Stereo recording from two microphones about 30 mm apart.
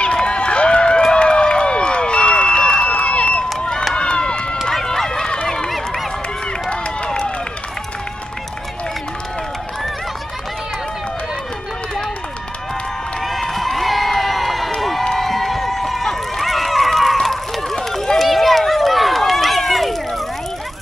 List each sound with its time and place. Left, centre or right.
0.0 s run: left
1.1 s crowd: left
2.5 s a sound: left
3.9 s run: left
4.9 s run: centre
7.1 s run: left
13.2 s crowd: centre
15.1 s a sound: centre
18.1 s run: centre